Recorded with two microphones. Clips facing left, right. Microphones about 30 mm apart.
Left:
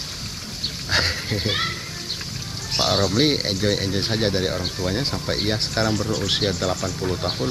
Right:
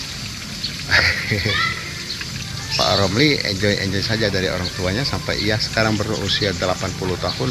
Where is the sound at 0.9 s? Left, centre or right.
Right.